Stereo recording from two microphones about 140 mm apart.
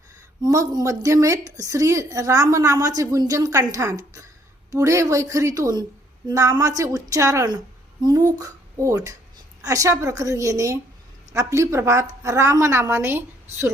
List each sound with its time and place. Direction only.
0.4 s a woman's voice: 25° right (ahead or behind)